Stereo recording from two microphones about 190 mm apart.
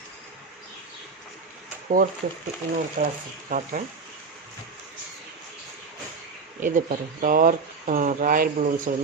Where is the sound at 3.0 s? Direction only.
50° right (ahead or behind).